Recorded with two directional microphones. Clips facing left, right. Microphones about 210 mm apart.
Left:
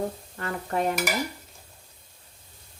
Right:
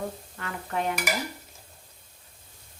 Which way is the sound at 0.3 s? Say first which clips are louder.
Left 4 dB; 40° left (ahead or behind).